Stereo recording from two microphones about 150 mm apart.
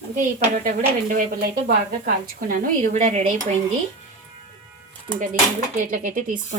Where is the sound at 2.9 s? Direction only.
50° right (ahead or behind).